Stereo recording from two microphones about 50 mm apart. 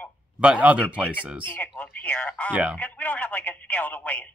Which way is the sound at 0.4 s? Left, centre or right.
Right.